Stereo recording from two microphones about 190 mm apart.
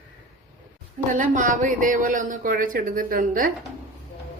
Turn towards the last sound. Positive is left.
turn(degrees=-45)  # may be behind; listen again after turning